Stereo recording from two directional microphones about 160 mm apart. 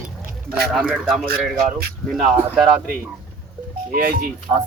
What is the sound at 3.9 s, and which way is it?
Speech, 60° right (ahead or behind).